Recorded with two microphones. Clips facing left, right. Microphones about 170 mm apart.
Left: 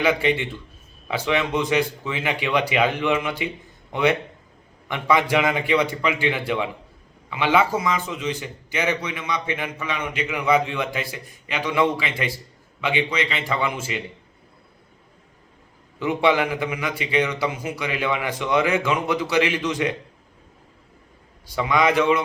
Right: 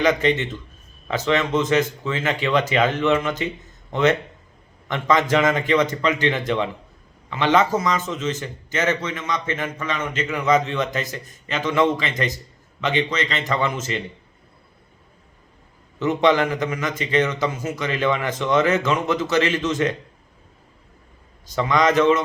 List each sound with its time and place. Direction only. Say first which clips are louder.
0.0 s a man's voice: right 2 dB; 10° left (ahead or behind)
16.0 s a man's voice: right 2 dB; 10° left (ahead or behind)
21.5 s a man's voice: right 1 dB; 10° left (ahead or behind)